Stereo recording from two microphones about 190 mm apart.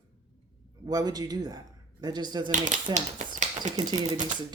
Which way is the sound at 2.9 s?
40° right (ahead or behind).